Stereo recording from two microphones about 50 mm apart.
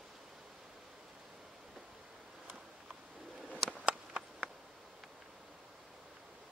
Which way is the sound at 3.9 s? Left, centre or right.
Right.